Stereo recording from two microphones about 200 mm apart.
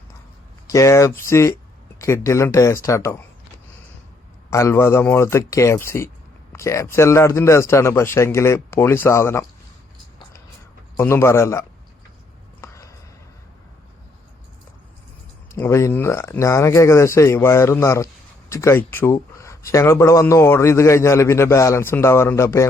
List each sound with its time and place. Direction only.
0.7 s speech: 15° left (ahead or behind)
4.5 s speech: 15° left (ahead or behind)
10.9 s speech: 10° left (ahead or behind)
12.6 s a sound: 15° left (ahead or behind)
15.5 s speech: 15° left (ahead or behind)